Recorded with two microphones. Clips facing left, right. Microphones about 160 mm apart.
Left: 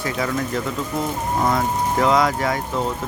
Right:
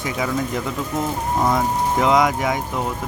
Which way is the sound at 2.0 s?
15° right (ahead or behind).